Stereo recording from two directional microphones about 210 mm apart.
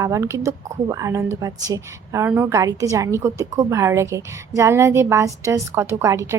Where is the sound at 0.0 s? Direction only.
15° right (ahead or behind).